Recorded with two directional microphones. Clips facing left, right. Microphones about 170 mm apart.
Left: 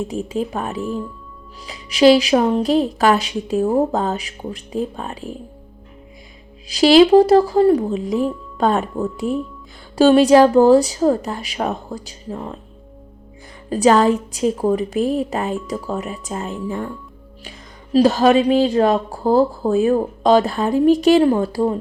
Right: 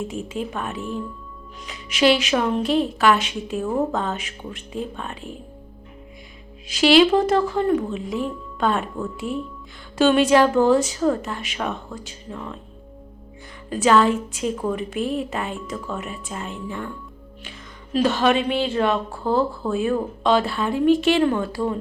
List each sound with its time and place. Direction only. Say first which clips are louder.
0.0 s a woman's voice: left 5 dB; 35° left (ahead or behind)
6.7 s a woman's voice: left 5 dB; 35° left (ahead or behind)
13.7 s a woman's voice: left 4 dB; 40° left (ahead or behind)
17.9 s a woman's voice: left 6 dB; 35° left (ahead or behind)